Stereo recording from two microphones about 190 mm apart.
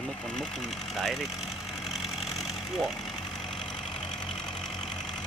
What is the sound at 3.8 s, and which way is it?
Vehicle, 5° left (ahead or behind).